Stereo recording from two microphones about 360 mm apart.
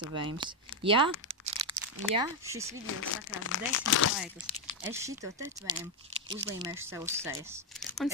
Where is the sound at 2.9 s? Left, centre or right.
Left.